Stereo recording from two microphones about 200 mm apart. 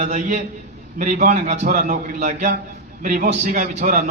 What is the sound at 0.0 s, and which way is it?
A man's voice, 35° right (ahead or behind).